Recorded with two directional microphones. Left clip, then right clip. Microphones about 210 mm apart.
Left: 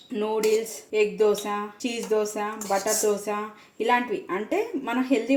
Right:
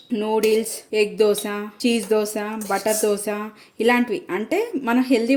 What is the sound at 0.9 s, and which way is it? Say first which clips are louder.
Speech: right 3 dB; 55° right (ahead or behind).